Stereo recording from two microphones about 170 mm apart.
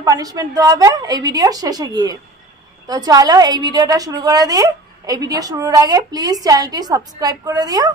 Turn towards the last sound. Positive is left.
turn(degrees=-20)  # may be behind; listen again after turning